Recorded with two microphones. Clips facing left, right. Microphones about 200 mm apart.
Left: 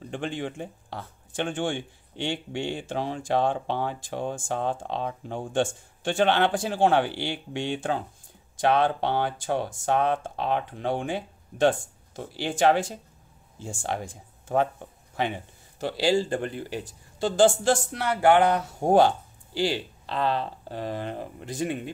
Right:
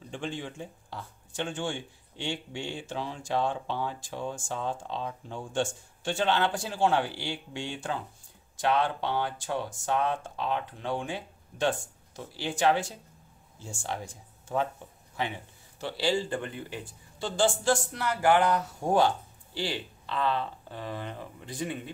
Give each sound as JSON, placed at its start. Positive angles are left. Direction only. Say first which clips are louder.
{"t": 0.1, "sound": "speech", "louder": "left 5 dB", "side_deg": 60}
{"t": 12.2, "sound": "speech", "louder": "left 5 dB", "side_deg": 55}
{"t": 15.8, "sound": "speech", "louder": "left 5 dB", "side_deg": 45}
{"t": 19.6, "sound": "speech", "louder": "left 7 dB", "side_deg": 40}